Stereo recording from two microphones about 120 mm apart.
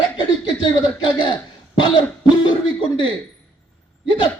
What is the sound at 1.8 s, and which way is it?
A man's voice, 40° left (ahead or behind).